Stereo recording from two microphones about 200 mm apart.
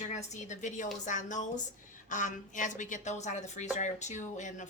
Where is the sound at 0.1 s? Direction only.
35° left (ahead or behind).